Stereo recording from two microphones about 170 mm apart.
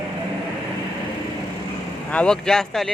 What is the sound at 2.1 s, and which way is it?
Speech, 5° left (ahead or behind).